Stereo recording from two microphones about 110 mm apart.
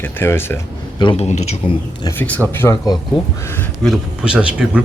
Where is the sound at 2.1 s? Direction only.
15° left (ahead or behind).